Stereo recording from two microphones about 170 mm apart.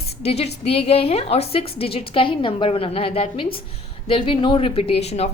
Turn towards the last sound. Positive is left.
turn(degrees=40)  # may be behind; listen again after turning